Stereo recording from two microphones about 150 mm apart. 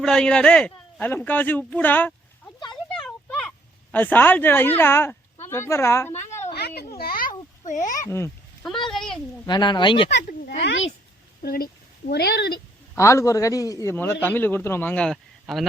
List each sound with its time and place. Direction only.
0.0 s speech: 5° left (ahead or behind)
3.0 s a sound: 5° left (ahead or behind)
3.9 s a man's voice: 10° left (ahead or behind)
6.5 s a sound: 90° left; by 7.9 s 55° left (ahead or behind)
8.0 s a man's voice: 20° left (ahead or behind)
8.9 s speech: centre (ahead or behind)
9.5 s speech: 30° left (ahead or behind)
11.4 s speech: 80° left
13.0 s a man's voice: 20° left (ahead or behind); by 15.6 s centre (ahead or behind)